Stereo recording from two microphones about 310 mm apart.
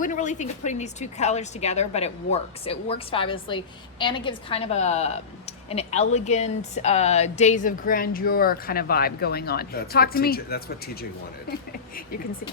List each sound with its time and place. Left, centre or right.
0.0 s speech: left